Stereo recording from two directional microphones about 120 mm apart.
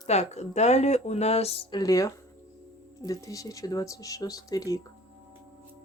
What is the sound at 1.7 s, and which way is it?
Speech, 30° left (ahead or behind).